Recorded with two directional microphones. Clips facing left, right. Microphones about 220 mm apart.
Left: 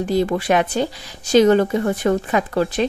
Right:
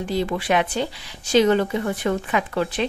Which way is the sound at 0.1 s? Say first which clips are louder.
Left 4 dB; 45° left (ahead or behind).